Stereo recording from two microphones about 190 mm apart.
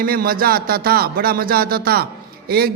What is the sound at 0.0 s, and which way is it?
A man's voice, 50° right (ahead or behind).